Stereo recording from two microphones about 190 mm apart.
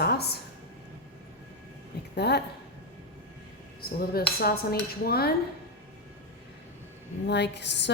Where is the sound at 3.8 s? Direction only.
50° left (ahead or behind).